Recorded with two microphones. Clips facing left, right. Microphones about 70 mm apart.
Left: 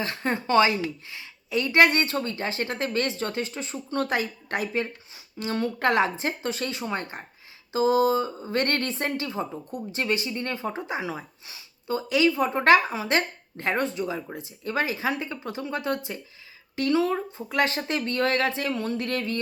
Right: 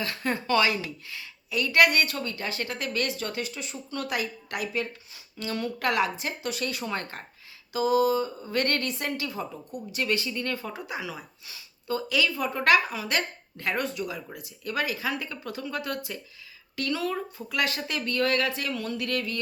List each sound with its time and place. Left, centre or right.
0.0 s a woman's voice: left
7.7 s a woman's voice: left